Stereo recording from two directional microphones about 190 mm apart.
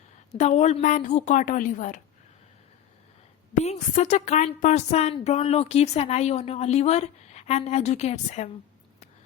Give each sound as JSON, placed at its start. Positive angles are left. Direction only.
{"t": 0.3, "sound": "a woman's voice", "side_deg": 35}
{"t": 3.5, "sound": "a woman's voice", "side_deg": 35}